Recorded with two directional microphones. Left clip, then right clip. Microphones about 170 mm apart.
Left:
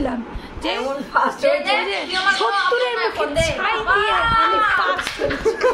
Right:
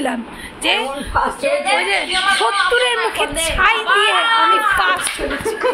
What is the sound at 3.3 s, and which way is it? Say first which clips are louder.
Speech: right 4 dB; 15° right (ahead or behind).